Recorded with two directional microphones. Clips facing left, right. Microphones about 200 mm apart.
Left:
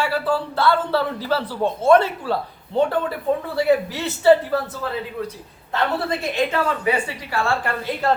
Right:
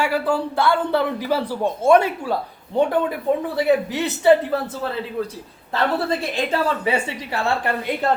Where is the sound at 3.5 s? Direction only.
20° right (ahead or behind).